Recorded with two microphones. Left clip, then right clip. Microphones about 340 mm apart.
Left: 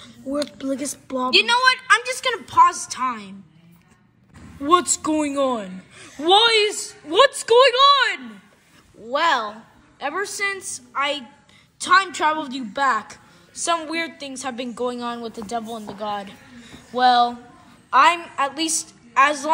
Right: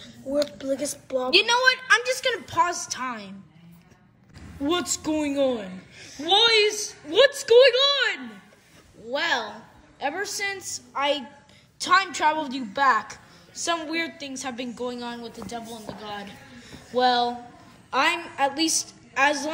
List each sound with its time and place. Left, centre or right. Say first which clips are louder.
0.5 s a woman's voice: left 1 dB; centre
1.3 s a woman's voice: left 3 dB; centre
4.6 s a woman's voice: left 8 dB; centre